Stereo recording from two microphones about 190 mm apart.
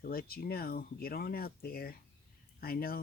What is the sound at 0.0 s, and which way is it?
Speech, 50° left (ahead or behind).